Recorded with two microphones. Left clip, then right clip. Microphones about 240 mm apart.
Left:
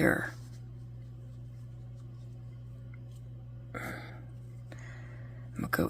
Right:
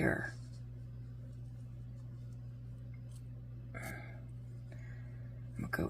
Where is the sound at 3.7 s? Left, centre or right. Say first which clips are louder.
Left 6 dB; left.